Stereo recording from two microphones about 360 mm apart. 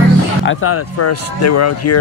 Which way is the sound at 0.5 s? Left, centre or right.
Left.